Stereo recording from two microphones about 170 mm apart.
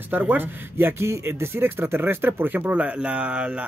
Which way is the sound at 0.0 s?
10° right (ahead or behind).